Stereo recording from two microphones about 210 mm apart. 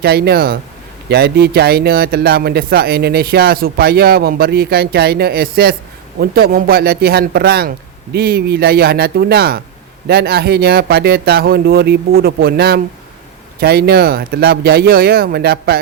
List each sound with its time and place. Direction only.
0.0 s speech: 50° right (ahead or behind)